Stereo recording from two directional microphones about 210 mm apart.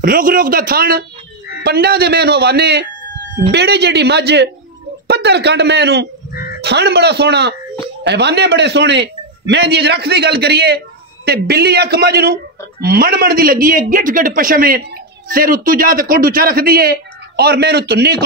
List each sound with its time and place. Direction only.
0.0 s a man's voice: 40° right (ahead or behind)